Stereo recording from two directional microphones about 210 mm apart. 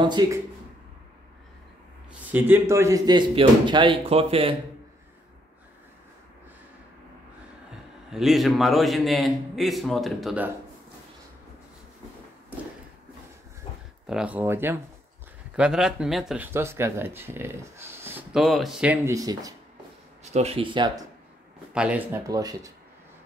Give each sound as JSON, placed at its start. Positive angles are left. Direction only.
{"t": 0.0, "sound": "speech", "side_deg": -20}
{"t": 2.3, "sound": "speech", "side_deg": -10}
{"t": 8.1, "sound": "a man's voice", "side_deg": 0}
{"t": 14.0, "sound": "speech", "side_deg": -5}
{"t": 20.3, "sound": "speech", "side_deg": -30}
{"t": 21.7, "sound": "speech", "side_deg": -5}